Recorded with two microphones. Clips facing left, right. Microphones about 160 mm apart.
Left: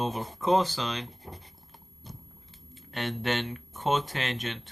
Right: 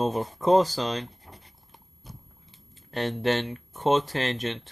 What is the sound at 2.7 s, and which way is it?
Speech, 35° right (ahead or behind).